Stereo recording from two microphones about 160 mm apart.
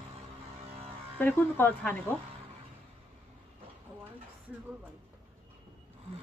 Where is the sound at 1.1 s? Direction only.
10° left (ahead or behind).